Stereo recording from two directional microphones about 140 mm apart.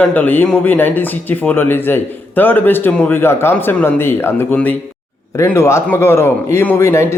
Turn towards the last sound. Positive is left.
turn(degrees=20)  # may be behind; listen again after turning